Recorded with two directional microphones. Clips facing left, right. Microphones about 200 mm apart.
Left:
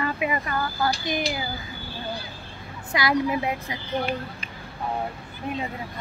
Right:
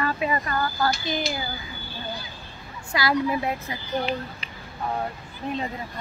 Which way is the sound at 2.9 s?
20° left (ahead or behind).